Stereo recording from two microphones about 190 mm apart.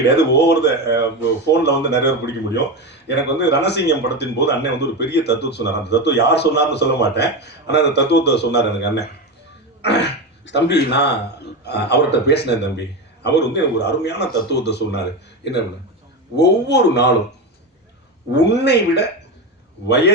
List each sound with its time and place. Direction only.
0.2 s speech: 65° left (ahead or behind)
16.3 s speech: 65° left (ahead or behind)
18.3 s speech: 65° left (ahead or behind)